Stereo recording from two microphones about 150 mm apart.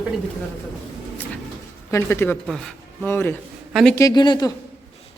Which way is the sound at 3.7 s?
Centre (ahead or behind).